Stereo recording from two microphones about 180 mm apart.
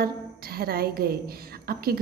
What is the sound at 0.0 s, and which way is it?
A woman's voice, 55° right (ahead or behind).